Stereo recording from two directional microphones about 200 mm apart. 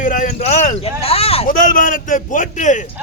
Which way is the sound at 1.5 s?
45° left (ahead or behind).